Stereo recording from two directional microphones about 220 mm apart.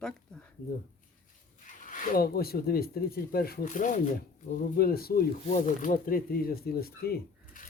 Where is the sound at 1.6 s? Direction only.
35° left (ahead or behind).